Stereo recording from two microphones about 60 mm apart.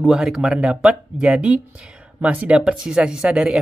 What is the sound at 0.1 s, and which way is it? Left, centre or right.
Speech, centre.